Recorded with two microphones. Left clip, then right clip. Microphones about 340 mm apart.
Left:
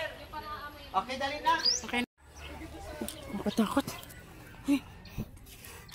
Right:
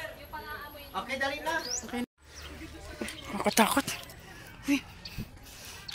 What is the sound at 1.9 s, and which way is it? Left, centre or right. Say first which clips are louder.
Bird: left 4 dB; centre.